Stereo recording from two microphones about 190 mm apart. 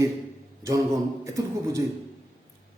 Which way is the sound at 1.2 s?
15° right (ahead or behind).